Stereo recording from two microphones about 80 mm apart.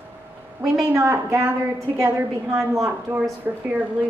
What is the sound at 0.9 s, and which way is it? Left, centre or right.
A woman's voice, right.